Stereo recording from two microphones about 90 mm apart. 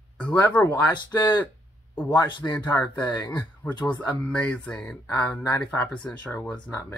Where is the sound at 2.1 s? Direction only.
50° left (ahead or behind).